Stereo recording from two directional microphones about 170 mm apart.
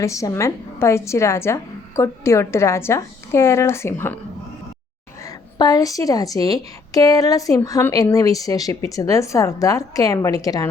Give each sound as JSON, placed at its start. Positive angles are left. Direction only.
{"t": 0.0, "sound": "a woman's voice", "side_deg": 20}
{"t": 5.2, "sound": "a woman's voice", "side_deg": 20}